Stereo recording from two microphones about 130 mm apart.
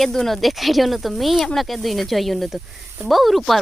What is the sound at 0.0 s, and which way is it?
Speech, 5° left (ahead or behind).